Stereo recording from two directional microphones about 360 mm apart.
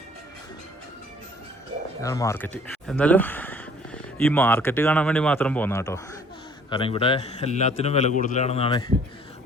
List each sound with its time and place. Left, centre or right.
2.0 s a man's voice: centre